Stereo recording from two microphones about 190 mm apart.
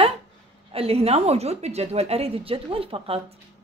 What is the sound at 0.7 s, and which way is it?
A man's voice, 30° right (ahead or behind).